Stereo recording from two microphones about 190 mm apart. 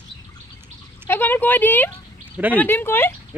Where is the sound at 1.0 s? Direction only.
10° left (ahead or behind).